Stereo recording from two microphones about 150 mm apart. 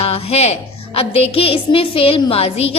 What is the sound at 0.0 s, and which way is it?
A woman's voice, 45° left (ahead or behind).